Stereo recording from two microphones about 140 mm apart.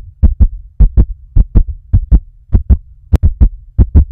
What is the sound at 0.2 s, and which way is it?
Heart sounds, centre (ahead or behind).